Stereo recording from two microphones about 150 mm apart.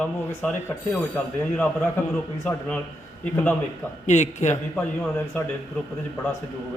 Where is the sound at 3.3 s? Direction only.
10° left (ahead or behind).